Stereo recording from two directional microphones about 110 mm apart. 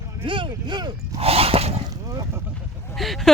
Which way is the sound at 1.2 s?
65° right (ahead or behind).